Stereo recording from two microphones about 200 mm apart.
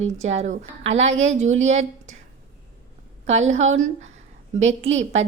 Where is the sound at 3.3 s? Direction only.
35° right (ahead or behind).